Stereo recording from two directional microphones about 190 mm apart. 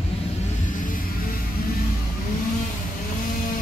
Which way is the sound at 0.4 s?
45° left (ahead or behind).